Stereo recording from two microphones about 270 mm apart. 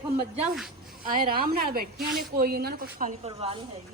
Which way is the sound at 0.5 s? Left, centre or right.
Centre.